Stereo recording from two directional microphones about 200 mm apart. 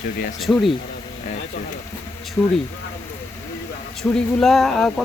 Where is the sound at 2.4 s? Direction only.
5° left (ahead or behind).